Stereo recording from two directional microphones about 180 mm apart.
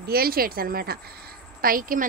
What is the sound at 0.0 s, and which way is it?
A woman's voice, 60° right (ahead or behind).